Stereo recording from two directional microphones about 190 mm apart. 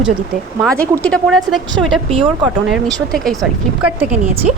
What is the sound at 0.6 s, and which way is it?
A woman's voice, 5° left (ahead or behind).